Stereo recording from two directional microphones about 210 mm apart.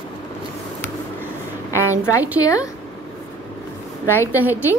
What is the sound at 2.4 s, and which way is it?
Speech, 15° left (ahead or behind).